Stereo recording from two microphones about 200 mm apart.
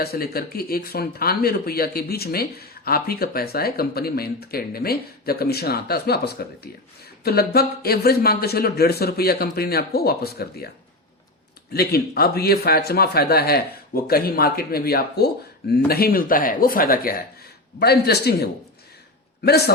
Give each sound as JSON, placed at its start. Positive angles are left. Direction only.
{"t": 0.0, "sound": "speech", "side_deg": 50}
{"t": 11.7, "sound": "speech", "side_deg": 50}
{"t": 19.5, "sound": "speech", "side_deg": 55}